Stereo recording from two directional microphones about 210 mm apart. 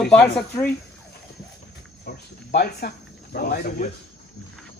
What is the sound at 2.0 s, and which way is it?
Speech, 50° left (ahead or behind).